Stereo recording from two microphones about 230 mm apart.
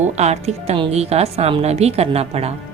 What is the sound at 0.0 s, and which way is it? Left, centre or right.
A woman's voice, right.